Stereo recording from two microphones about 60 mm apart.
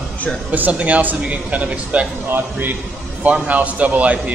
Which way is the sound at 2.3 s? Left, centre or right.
Right.